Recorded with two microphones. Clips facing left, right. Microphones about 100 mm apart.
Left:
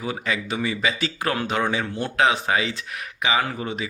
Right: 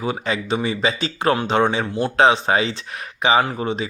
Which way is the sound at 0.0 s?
30° right (ahead or behind).